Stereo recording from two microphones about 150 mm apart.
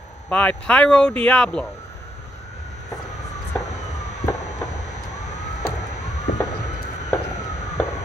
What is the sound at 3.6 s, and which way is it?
Emergency vehicle, 50° left (ahead or behind).